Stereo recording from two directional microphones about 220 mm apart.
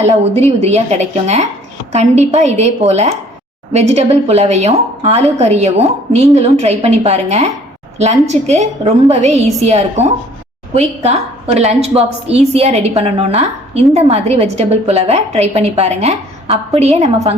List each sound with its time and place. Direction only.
0.1 s a woman's voice: 30° right (ahead or behind)
11.5 s a woman's voice: 30° right (ahead or behind)